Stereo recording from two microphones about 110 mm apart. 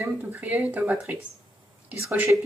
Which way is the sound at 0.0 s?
15° right (ahead or behind).